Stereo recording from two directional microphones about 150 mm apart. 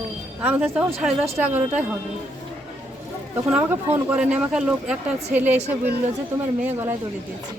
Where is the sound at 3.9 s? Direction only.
10° right (ahead or behind).